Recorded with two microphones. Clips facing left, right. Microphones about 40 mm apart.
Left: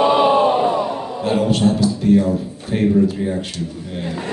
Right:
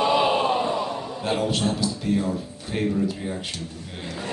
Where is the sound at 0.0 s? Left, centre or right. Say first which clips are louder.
Left 7 dB; left.